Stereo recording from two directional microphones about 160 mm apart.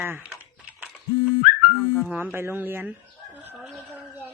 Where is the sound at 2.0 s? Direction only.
10° right (ahead or behind).